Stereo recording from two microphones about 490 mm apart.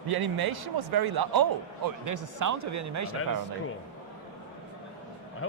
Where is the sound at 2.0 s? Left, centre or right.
Right.